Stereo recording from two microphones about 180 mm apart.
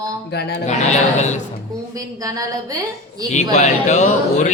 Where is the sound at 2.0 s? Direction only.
20° right (ahead or behind).